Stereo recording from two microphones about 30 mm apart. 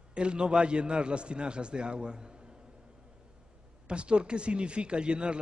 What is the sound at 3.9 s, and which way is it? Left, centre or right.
A man's voice, right.